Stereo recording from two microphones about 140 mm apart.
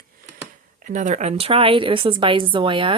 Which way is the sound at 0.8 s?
65° right (ahead or behind).